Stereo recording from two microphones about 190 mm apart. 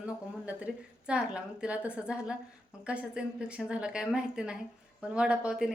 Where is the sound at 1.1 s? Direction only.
5° right (ahead or behind).